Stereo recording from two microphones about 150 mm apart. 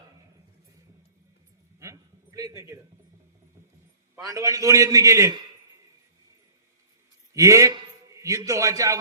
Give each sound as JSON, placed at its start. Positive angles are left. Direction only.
{"t": 1.8, "sound": "a sound", "side_deg": -20}
{"t": 4.2, "sound": "a man's voice", "side_deg": -20}
{"t": 7.3, "sound": "a man's voice", "side_deg": -20}